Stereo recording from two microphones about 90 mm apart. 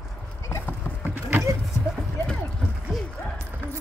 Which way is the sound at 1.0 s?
25° right (ahead or behind).